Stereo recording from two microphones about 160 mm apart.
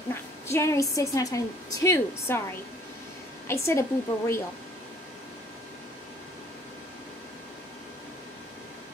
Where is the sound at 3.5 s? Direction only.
15° left (ahead or behind).